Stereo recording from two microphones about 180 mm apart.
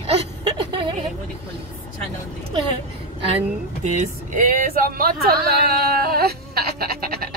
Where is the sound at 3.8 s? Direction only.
45° right (ahead or behind).